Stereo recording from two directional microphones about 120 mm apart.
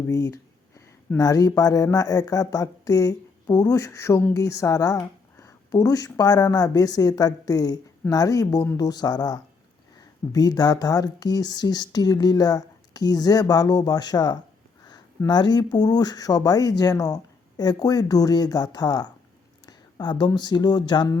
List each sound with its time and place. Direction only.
0.1 s a woman's voice: 25° left (ahead or behind)